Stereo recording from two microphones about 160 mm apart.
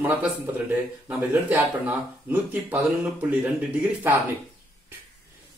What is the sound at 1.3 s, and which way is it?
Speech, 10° right (ahead or behind).